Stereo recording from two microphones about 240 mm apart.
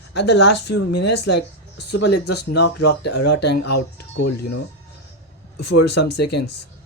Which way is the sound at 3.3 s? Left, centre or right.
Left.